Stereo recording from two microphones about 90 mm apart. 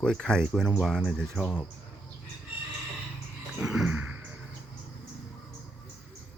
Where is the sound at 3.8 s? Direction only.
20° right (ahead or behind).